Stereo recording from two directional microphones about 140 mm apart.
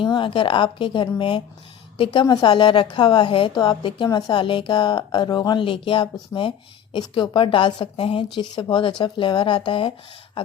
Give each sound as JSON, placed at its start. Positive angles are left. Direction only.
{"t": 0.0, "sound": "a woman's voice", "side_deg": 35}